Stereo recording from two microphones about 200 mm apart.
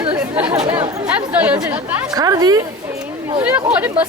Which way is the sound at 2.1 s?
20° right (ahead or behind).